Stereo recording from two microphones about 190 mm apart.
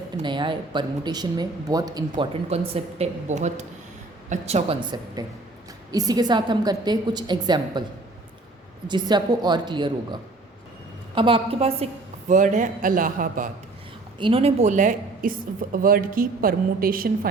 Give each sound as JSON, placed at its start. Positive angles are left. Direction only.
{"t": 0.2, "sound": "speech", "side_deg": -25}
{"t": 2.3, "sound": "a woman's voice", "side_deg": -35}
{"t": 8.9, "sound": "speech", "side_deg": -20}
{"t": 12.3, "sound": "a woman's voice", "side_deg": -40}
{"t": 14.2, "sound": "a woman's voice", "side_deg": -30}